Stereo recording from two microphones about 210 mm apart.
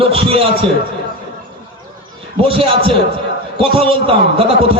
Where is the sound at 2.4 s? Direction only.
25° right (ahead or behind).